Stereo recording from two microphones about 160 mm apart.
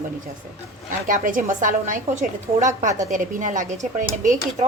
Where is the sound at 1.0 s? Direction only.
55° right (ahead or behind).